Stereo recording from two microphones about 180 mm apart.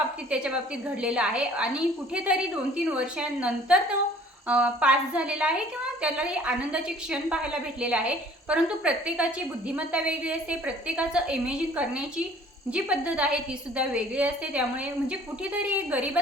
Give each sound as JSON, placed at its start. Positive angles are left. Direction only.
{"t": 0.3, "sound": "a woman's voice", "side_deg": -5}